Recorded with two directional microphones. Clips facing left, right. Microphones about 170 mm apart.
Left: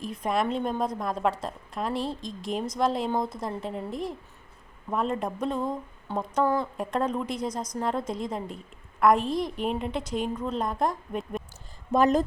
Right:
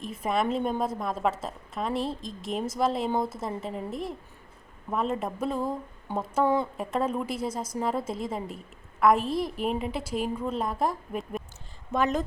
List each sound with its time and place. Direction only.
0.0 s a woman's voice: centre (ahead or behind)
11.9 s speech: 35° left (ahead or behind)